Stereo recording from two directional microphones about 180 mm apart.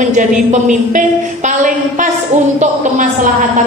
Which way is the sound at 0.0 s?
40° right (ahead or behind).